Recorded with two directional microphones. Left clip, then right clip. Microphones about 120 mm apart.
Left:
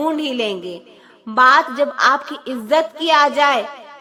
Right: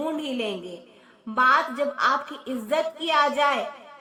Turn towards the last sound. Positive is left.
turn(degrees=35)  # may be behind; listen again after turning